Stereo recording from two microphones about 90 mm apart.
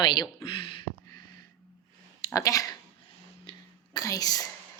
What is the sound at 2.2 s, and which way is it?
Speech, 40° left (ahead or behind).